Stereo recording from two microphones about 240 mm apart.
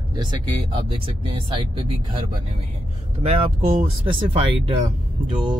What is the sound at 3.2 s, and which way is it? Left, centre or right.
Speech, right.